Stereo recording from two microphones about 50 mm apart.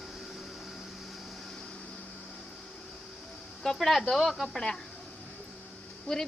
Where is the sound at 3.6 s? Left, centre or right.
Centre.